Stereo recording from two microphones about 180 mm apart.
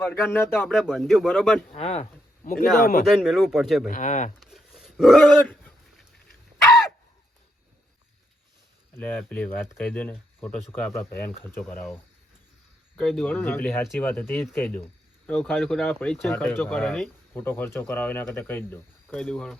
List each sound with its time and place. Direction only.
0.0 s speech: 10° left (ahead or behind)
0.7 s a man's voice: centre (ahead or behind)
1.7 s speech: 35° left (ahead or behind)
2.8 s speech: 55° left (ahead or behind)
3.1 s a man's voice: centre (ahead or behind)
3.8 s speech: 45° left (ahead or behind)
4.4 s a sound: centre (ahead or behind)
9.0 s speech: 10° left (ahead or behind)
13.0 s a man's voice: 5° left (ahead or behind)